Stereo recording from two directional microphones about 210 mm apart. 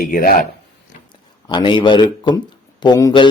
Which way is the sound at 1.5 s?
20° left (ahead or behind).